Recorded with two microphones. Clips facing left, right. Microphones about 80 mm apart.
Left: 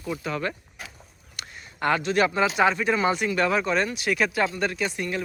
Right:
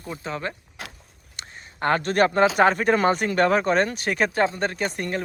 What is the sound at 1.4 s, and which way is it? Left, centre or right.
Speech, right.